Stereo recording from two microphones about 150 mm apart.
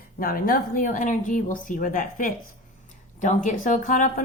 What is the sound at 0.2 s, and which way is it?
A woman's voice, 75° left (ahead or behind).